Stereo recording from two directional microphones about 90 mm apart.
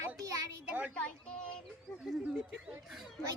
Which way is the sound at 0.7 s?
15° right (ahead or behind).